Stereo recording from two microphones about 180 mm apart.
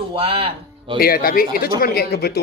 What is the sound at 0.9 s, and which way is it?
Speech, 55° left (ahead or behind).